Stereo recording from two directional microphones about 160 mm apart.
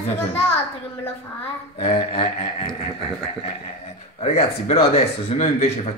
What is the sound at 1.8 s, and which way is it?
Speech, 35° left (ahead or behind).